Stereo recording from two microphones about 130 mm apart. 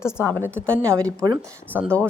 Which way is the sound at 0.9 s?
25° right (ahead or behind).